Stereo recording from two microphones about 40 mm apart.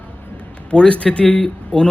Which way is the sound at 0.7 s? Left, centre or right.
Left.